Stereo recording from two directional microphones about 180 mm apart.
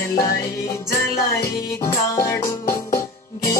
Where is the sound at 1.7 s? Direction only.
15° left (ahead or behind).